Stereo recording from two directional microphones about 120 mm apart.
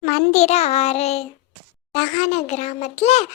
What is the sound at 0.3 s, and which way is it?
Child singing, 65° left (ahead or behind).